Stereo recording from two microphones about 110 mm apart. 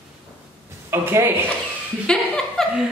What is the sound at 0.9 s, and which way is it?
Speech, 20° right (ahead or behind).